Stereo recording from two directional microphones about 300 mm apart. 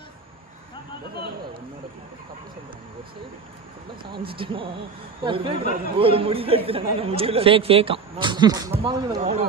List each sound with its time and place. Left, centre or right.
1.1 s a man's voice: right
4.3 s speech: centre